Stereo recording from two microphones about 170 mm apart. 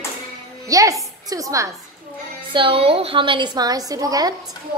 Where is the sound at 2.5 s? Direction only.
30° right (ahead or behind).